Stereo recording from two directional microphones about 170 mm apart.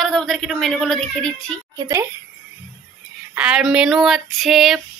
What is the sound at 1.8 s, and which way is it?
Speech, 20° right (ahead or behind).